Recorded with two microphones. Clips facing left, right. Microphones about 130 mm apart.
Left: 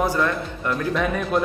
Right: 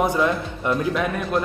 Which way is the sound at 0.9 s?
Centre (ahead or behind).